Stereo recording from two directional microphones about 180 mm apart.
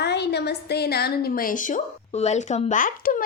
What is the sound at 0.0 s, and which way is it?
A woman's voice, 70° left (ahead or behind).